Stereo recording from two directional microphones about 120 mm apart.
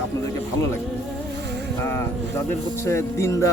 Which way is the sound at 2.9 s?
20° left (ahead or behind).